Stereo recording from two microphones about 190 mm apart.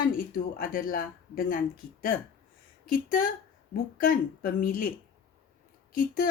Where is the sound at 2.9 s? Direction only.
45° left (ahead or behind).